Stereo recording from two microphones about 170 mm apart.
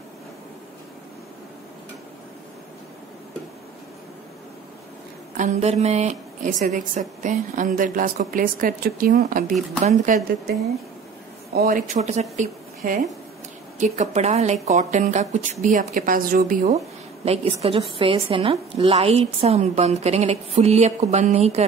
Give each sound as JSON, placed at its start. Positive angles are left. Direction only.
{"t": 5.4, "sound": "a woman's voice", "side_deg": -40}
{"t": 11.5, "sound": "a woman's voice", "side_deg": -55}